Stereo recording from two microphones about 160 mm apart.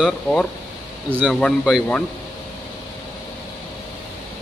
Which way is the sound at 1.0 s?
10° right (ahead or behind).